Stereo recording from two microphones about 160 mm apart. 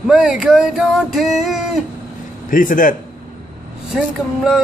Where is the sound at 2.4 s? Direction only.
55° left (ahead or behind).